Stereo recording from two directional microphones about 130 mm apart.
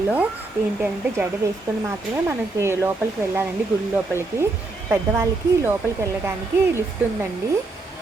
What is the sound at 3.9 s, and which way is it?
Speech, 20° right (ahead or behind).